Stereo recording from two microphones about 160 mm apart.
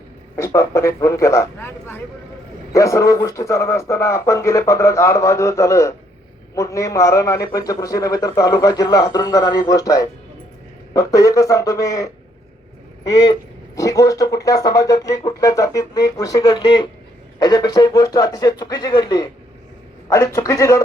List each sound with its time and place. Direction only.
0.3 s a man's voice: 20° left (ahead or behind)
13.7 s a man's voice: 20° left (ahead or behind)